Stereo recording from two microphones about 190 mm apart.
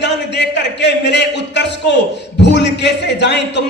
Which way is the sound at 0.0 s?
65° left (ahead or behind).